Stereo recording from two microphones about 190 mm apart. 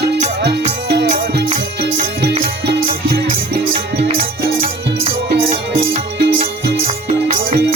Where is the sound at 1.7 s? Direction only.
55° right (ahead or behind).